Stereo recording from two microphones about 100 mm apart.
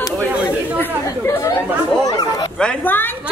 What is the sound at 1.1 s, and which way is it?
Chatter, 35° left (ahead or behind).